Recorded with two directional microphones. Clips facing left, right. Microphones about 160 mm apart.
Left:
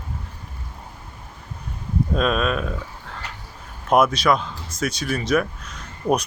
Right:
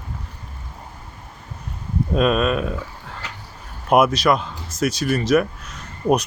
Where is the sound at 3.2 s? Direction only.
90° right.